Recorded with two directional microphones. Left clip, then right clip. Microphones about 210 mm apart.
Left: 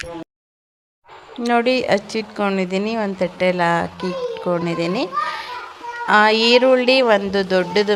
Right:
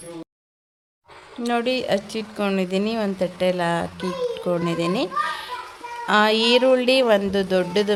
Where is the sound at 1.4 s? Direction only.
10° left (ahead or behind).